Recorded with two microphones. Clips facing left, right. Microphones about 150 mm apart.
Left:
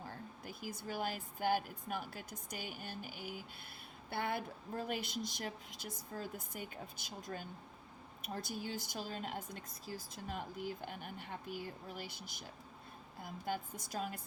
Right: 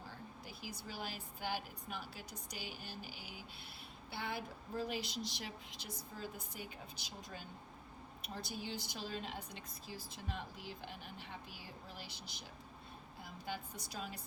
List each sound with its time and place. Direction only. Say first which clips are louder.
0.4 s a woman's voice: left 6 dB; 50° left (ahead or behind)